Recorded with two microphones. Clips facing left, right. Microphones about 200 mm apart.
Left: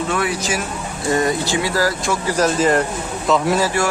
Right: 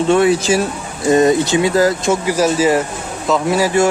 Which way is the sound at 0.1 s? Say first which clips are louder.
Right 9 dB; 25° right (ahead or behind).